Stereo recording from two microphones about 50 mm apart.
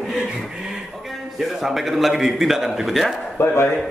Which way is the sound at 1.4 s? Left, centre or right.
Centre.